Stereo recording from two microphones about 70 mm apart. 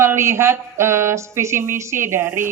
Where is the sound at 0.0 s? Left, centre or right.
Right.